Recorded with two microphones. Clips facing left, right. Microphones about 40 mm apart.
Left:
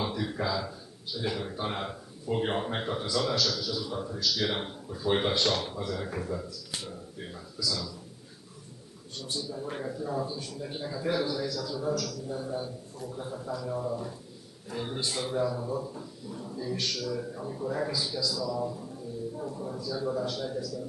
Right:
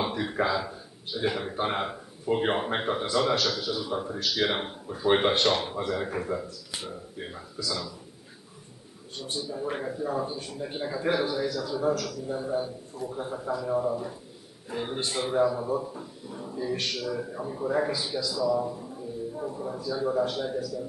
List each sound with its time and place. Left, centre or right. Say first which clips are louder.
0.0 s speech: right 4 dB; right
9.1 s speech: right 2 dB; right